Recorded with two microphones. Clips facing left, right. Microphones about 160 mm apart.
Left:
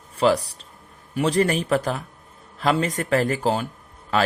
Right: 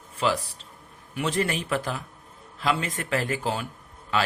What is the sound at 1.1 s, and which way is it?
A man's voice, 40° left (ahead or behind).